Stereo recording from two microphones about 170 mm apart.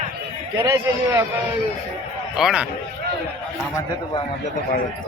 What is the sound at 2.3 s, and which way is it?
Speech, 5° right (ahead or behind).